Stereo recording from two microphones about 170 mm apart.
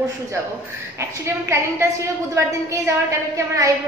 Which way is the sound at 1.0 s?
15° right (ahead or behind).